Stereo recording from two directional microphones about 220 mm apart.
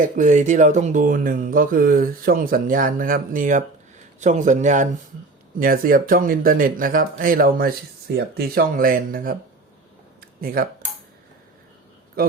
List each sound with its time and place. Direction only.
0.0 s speech: 35° right (ahead or behind)
10.2 s a sound: 40° right (ahead or behind)
12.2 s a man's voice: 40° right (ahead or behind)